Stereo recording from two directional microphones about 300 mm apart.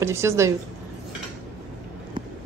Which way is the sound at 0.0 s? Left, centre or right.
Centre.